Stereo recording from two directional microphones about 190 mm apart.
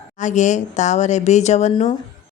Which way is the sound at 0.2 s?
40° left (ahead or behind).